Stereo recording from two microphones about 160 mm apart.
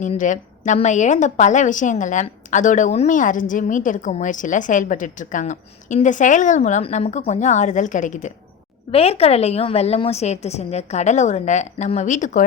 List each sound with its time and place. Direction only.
0.0 s a woman's voice: 50° left (ahead or behind)
8.9 s a woman's voice: 40° left (ahead or behind)